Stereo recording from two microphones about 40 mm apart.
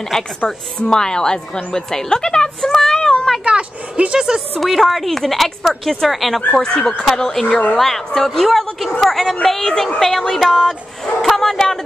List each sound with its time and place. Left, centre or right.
0.1 s a woman's voice: centre
0.7 s a woman's voice: centre
2.6 s child singing: centre
3.4 s speech: right
4.6 s a woman's voice: centre
6.5 s a woman's voice: centre
7.7 s a woman's voice: centre